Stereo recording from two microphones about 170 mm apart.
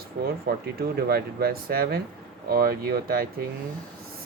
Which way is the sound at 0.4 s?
65° right (ahead or behind).